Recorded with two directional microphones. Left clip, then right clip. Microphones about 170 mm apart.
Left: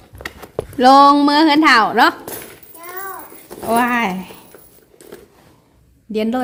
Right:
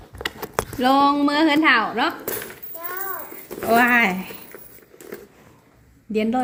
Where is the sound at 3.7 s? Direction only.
25° left (ahead or behind).